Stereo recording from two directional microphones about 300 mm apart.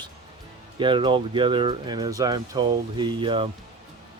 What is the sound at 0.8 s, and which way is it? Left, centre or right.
Speech, centre.